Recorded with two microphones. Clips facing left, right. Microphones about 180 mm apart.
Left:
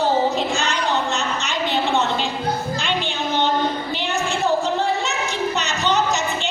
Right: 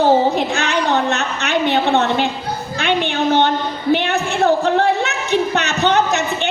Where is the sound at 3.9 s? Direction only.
60° right (ahead or behind).